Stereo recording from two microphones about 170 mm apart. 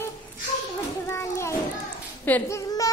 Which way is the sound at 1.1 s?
15° left (ahead or behind).